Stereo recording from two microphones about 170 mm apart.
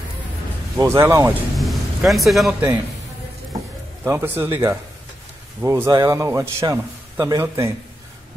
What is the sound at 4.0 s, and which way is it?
A man's voice, 15° right (ahead or behind).